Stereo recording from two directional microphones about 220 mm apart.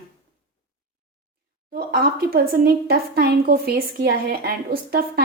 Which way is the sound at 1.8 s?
40° right (ahead or behind).